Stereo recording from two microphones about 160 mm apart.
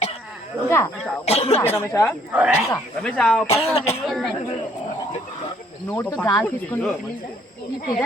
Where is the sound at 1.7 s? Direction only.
15° left (ahead or behind).